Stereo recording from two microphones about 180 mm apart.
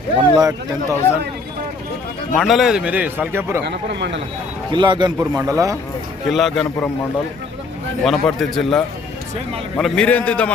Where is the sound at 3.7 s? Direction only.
70° right (ahead or behind).